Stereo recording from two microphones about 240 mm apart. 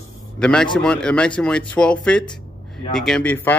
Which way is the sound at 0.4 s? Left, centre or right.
Centre.